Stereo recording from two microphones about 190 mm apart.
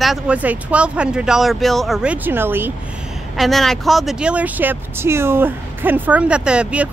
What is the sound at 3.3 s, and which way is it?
Speech, centre (ahead or behind).